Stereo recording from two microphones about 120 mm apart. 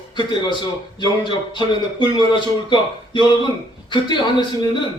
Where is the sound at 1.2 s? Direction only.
40° left (ahead or behind).